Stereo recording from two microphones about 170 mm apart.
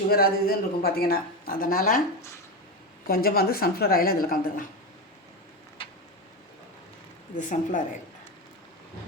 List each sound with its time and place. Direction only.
0.1 s a woman's voice: 60° left (ahead or behind)
3.1 s a woman's voice: 65° left (ahead or behind)
7.3 s a woman's voice: 45° left (ahead or behind)